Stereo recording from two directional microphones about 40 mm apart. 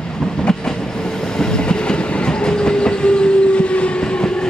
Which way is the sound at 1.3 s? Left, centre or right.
Centre.